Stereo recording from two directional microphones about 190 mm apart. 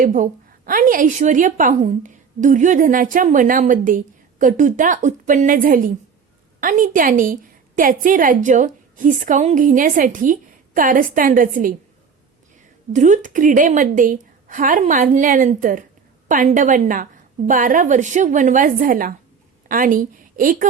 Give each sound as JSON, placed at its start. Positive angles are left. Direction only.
{"t": 0.0, "sound": "a woman's voice", "side_deg": -45}
{"t": 12.9, "sound": "a woman's voice", "side_deg": -40}